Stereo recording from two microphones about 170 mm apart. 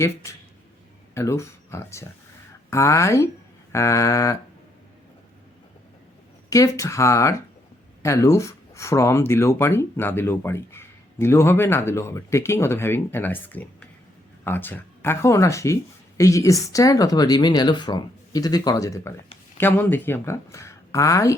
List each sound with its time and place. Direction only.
0.2 s speech: 15° left (ahead or behind)
6.5 s speech: 20° left (ahead or behind)